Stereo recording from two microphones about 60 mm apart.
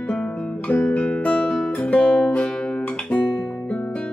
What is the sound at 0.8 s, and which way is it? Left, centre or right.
Music, left.